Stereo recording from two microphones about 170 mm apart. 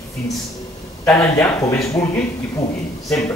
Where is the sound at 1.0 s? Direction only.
15° left (ahead or behind).